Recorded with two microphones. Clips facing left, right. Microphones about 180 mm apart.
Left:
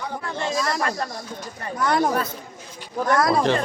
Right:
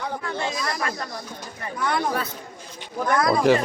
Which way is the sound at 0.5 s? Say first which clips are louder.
Left 4 dB; 45° left (ahead or behind).